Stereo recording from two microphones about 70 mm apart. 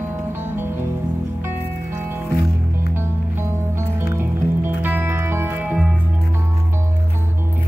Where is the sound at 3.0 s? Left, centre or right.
Right.